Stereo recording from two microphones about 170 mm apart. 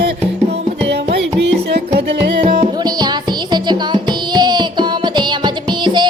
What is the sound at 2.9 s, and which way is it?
Music, 25° right (ahead or behind).